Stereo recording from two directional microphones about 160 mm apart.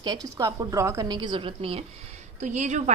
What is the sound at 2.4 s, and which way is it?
Speech, 45° right (ahead or behind).